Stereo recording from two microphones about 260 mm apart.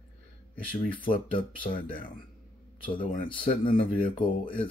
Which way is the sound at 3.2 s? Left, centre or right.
Left.